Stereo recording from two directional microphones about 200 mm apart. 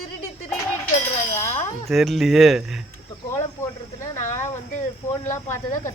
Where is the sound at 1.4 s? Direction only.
35° left (ahead or behind).